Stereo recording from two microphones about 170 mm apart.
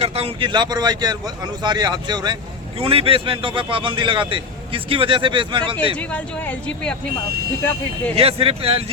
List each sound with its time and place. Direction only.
0.0 s speech: 35° right (ahead or behind)
6.0 s speech: 10° left (ahead or behind)
8.1 s speech: 35° right (ahead or behind)